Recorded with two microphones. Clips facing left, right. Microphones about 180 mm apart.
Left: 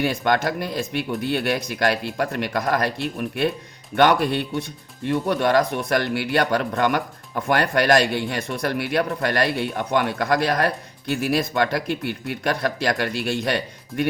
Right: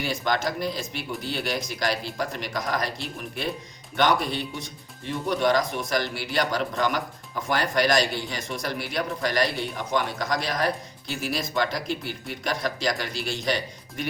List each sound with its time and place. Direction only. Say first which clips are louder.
0.0 s speech: left 5 dB; 60° left (ahead or behind)
3.9 s speech: left 5 dB; 60° left (ahead or behind)